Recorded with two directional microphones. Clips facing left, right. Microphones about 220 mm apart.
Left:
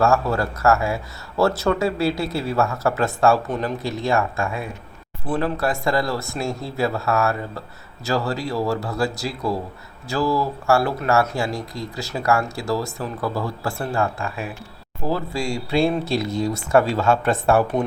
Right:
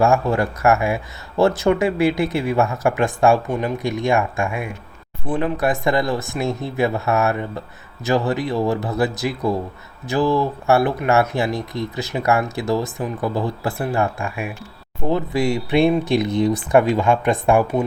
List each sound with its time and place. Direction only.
0.0 s speech: 15° right (ahead or behind)